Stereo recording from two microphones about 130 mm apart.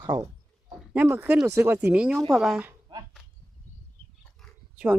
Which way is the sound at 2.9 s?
35° right (ahead or behind).